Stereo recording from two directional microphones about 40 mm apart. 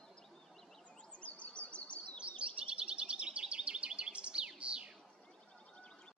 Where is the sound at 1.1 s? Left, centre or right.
Left.